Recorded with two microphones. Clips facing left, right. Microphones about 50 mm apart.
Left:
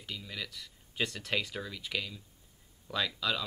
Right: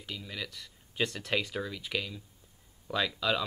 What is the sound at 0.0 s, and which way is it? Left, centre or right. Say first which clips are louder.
Speech: right 1 dB; centre.